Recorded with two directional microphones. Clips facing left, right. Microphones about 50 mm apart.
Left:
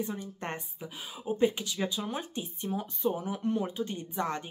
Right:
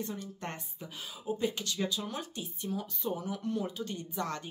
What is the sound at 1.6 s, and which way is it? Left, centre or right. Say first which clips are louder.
Speech: left 1 dB; centre.